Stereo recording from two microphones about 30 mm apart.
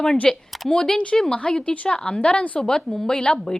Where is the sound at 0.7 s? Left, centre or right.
Left.